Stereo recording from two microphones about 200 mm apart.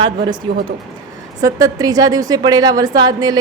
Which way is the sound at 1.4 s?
15° right (ahead or behind).